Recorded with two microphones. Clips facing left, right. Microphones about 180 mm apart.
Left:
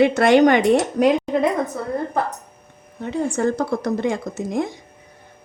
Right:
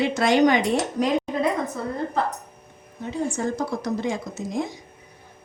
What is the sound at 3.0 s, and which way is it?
A woman's voice, 60° left (ahead or behind).